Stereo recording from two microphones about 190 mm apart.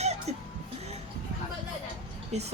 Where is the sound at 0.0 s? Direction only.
35° right (ahead or behind).